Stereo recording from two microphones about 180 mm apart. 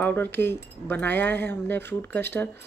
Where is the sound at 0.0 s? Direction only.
10° left (ahead or behind).